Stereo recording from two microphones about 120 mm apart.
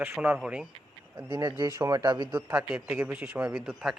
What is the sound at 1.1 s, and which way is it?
Speech, 40° right (ahead or behind).